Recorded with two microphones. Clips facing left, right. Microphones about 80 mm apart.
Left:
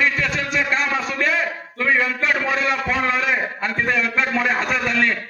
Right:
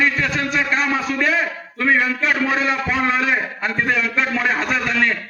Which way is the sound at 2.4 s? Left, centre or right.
Centre.